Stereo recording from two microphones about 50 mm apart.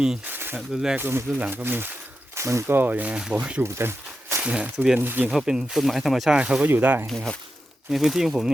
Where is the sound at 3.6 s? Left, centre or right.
Right.